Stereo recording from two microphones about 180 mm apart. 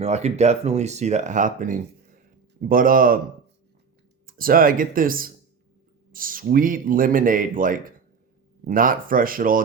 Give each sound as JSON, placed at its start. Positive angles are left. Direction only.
{"t": 0.0, "sound": "speech", "side_deg": -35}
{"t": 4.3, "sound": "speech", "side_deg": -55}